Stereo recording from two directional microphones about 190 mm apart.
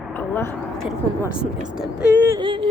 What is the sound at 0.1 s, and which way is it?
Speech, 10° left (ahead or behind).